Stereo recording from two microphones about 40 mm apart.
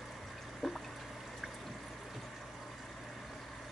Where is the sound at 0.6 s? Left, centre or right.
Centre.